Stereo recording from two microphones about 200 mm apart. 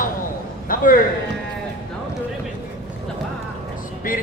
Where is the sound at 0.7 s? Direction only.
45° left (ahead or behind).